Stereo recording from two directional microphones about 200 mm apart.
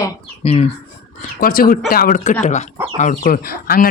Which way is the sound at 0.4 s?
30° left (ahead or behind).